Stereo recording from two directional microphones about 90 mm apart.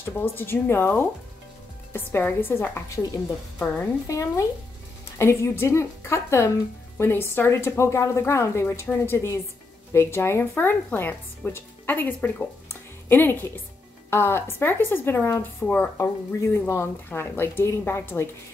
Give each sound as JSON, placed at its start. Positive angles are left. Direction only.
{"t": 0.0, "sound": "a woman's voice", "side_deg": 25}
{"t": 3.5, "sound": "a woman's voice", "side_deg": 15}
{"t": 4.1, "sound": "a woman's voice", "side_deg": 35}
{"t": 12.6, "sound": "music", "side_deg": 25}
{"t": 14.1, "sound": "a woman's voice", "side_deg": 25}
{"t": 15.6, "sound": "speech", "side_deg": 15}
{"t": 16.0, "sound": "a woman's voice", "side_deg": 30}